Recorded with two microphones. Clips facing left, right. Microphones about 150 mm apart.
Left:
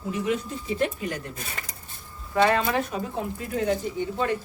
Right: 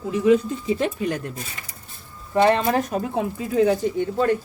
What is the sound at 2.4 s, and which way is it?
Speech, 35° right (ahead or behind).